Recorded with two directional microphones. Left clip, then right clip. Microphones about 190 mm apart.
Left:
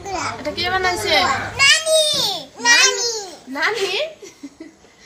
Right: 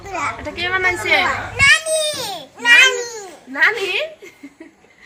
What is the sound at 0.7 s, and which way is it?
Speech, 25° left (ahead or behind).